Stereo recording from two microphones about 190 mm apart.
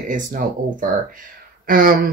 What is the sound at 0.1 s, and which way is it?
Speech, 45° right (ahead or behind).